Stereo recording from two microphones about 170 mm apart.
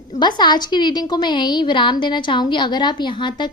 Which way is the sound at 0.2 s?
25° left (ahead or behind).